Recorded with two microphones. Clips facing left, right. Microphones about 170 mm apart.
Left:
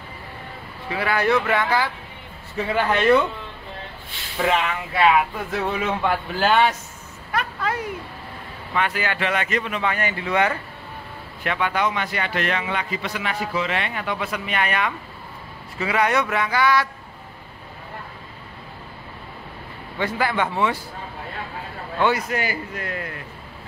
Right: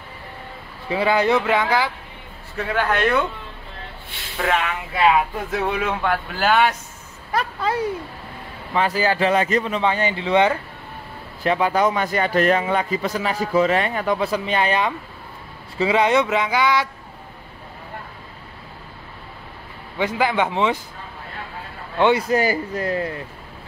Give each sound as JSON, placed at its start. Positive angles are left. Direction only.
{"t": 0.8, "sound": "speech", "side_deg": -25}
{"t": 2.5, "sound": "speech", "side_deg": 5}
{"t": 4.4, "sound": "speech", "side_deg": 0}
{"t": 5.7, "sound": "speech", "side_deg": 0}
{"t": 7.3, "sound": "a man's voice", "side_deg": -30}
{"t": 20.0, "sound": "speech", "side_deg": -15}
{"t": 22.0, "sound": "speech", "side_deg": -25}